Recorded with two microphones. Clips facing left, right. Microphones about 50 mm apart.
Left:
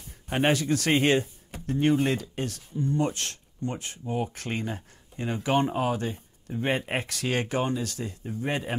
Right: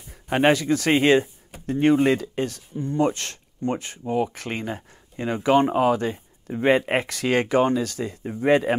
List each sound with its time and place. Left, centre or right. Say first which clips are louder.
0.3 s speech: right 5 dB; right